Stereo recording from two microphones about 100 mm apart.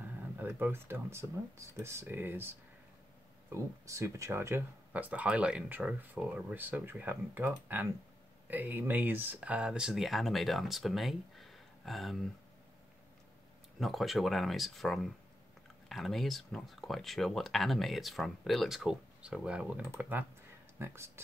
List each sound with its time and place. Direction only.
0.0 s speech: 20° right (ahead or behind)
3.5 s speech: 30° right (ahead or behind); by 12.2 s centre (ahead or behind)
13.7 s speech: centre (ahead or behind); by 21.1 s 25° right (ahead or behind)